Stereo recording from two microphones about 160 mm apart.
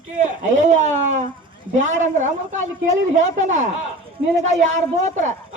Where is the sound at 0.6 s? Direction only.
50° right (ahead or behind).